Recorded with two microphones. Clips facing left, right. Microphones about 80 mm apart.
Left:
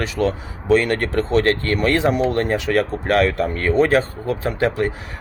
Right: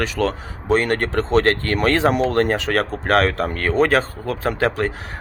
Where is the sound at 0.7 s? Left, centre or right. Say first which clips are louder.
Left 2 dB; right.